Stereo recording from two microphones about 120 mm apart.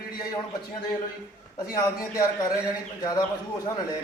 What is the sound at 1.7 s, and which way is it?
Speech, 30° left (ahead or behind).